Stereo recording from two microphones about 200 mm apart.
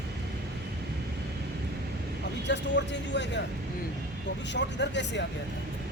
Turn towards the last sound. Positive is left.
turn(degrees=60)  # may be behind; listen again after turning